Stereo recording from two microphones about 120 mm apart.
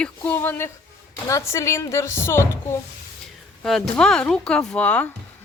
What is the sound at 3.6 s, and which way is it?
Speech, 5° left (ahead or behind).